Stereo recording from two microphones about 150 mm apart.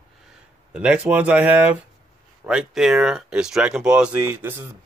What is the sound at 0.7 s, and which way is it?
Speech, 10° right (ahead or behind).